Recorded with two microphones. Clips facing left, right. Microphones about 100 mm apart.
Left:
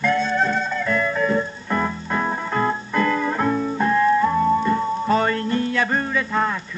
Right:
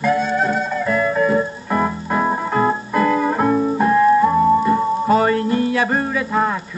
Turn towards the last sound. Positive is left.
turn(degrees=-15)  # may be behind; listen again after turning